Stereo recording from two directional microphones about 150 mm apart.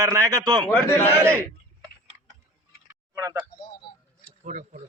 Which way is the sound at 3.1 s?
20° right (ahead or behind).